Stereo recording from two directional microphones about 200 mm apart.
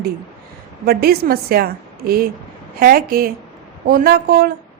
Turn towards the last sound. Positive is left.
turn(degrees=-50)  # may be behind; listen again after turning